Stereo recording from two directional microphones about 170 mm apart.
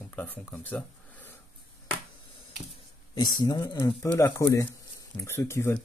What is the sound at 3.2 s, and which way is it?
Speech, 25° left (ahead or behind).